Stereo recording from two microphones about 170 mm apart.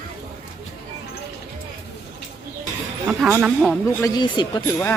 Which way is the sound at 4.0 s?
20° left (ahead or behind).